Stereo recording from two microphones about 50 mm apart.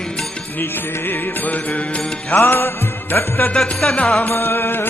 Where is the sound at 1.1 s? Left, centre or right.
Left.